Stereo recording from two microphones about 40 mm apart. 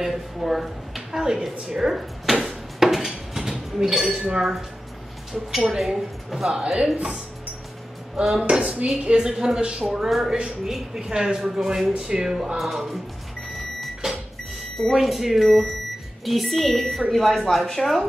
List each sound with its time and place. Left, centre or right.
0.0 s a woman's voice: centre
2.4 s a sound: centre
4.0 s dishes: right
4.4 s a woman's voice: centre
5.7 s a woman's voice: centre
6.5 s dishes: right
8.2 s a woman's voice: centre
8.5 s dishes: right
9.3 s a woman's voice: centre
9.7 s dishes: centre
10.0 s a woman's voice: centre
14.0 s microwave oven: centre
14.8 s speech: centre